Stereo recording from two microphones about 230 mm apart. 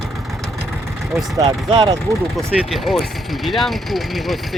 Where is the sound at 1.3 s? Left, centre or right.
Centre.